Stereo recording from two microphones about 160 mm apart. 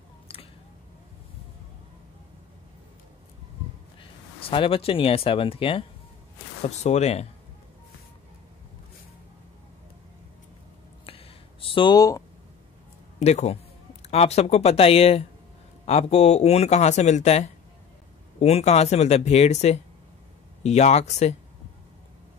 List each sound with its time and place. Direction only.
4.0 s speech: 35° left (ahead or behind)
11.1 s a sound: 35° left (ahead or behind)
13.2 s speech: 45° left (ahead or behind)